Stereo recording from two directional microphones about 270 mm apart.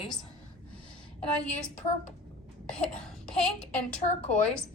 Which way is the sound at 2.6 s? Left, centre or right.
Centre.